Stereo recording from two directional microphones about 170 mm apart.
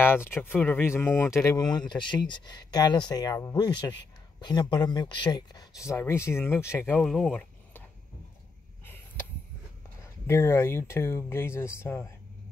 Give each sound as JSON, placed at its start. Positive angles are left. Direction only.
{"t": 0.0, "sound": "speech", "side_deg": 15}
{"t": 7.0, "sound": "speech", "side_deg": 0}
{"t": 8.8, "sound": "a sound", "side_deg": 15}
{"t": 10.2, "sound": "speech", "side_deg": 15}